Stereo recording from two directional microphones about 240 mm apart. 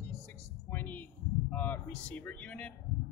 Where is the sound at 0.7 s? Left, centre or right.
Centre.